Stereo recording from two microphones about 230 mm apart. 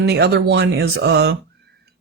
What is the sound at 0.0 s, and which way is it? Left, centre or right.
Speech, right.